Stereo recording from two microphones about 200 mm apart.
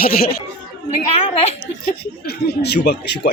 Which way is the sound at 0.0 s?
50° left (ahead or behind).